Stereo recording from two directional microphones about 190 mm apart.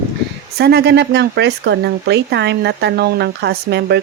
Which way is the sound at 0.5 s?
55° right (ahead or behind).